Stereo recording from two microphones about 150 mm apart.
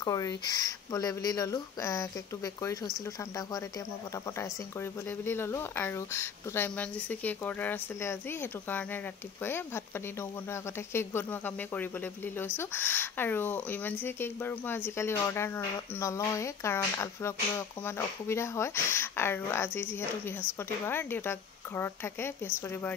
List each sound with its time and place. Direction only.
0.0 s speech: 25° left (ahead or behind)
4.4 s speech: 15° left (ahead or behind)